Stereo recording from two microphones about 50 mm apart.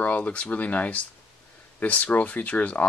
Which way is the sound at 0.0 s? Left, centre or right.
Left.